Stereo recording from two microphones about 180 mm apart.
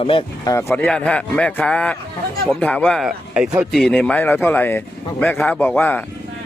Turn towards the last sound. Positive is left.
turn(degrees=10)  # may be behind; listen again after turning